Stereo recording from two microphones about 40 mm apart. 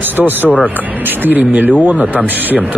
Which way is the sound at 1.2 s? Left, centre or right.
Right.